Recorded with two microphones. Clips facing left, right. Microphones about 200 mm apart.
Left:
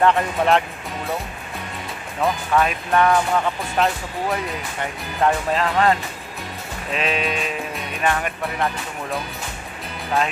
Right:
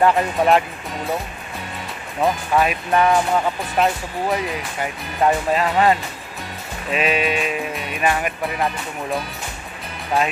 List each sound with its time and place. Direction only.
0.0 s speech: 5° right (ahead or behind)
2.2 s speech: 15° right (ahead or behind)
3.7 s speech: 5° right (ahead or behind)